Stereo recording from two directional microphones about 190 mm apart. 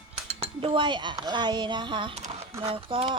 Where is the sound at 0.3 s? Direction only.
25° right (ahead or behind).